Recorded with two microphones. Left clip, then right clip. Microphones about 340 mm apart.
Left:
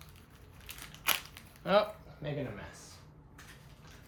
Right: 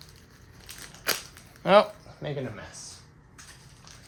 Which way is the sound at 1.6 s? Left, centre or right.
Right.